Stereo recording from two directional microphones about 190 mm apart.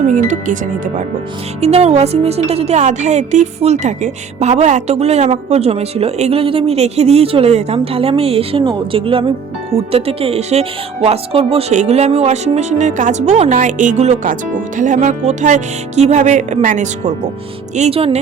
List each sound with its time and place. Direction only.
0.1 s speech: 40° right (ahead or behind)